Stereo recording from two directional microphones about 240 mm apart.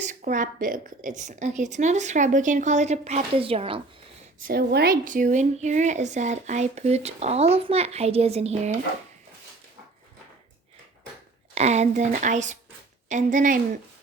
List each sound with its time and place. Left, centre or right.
0.0 s a woman's voice: right
4.4 s speech: right
11.5 s a woman's voice: right